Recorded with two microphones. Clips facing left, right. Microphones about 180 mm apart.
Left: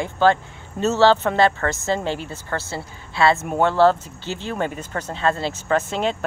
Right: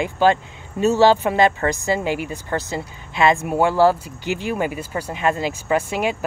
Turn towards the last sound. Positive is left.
turn(degrees=-10)  # may be behind; listen again after turning